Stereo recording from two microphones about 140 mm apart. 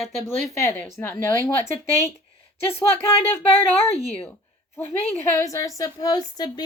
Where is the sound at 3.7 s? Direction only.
50° left (ahead or behind).